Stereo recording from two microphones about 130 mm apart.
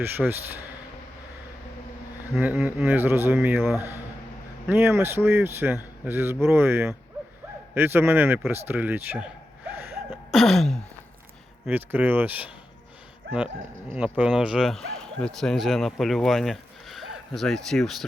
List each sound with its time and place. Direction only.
0.0 s a man's voice: 15° right (ahead or behind)
2.4 s a man's voice: 10° right (ahead or behind)
8.6 s gasp: 15° right (ahead or behind)
10.1 s a sound: centre (ahead or behind)
11.7 s a man's voice: 15° right (ahead or behind)
13.9 s speech: 10° right (ahead or behind)